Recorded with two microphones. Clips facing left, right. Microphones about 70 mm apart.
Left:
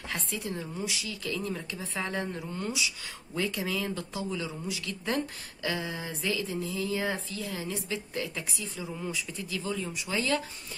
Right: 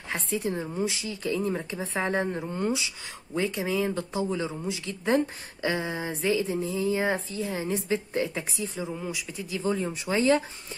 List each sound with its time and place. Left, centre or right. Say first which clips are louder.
0.1 s speech: right 6 dB; right
8.9 s speech: right 2 dB; centre
9.5 s speech: right 7 dB; right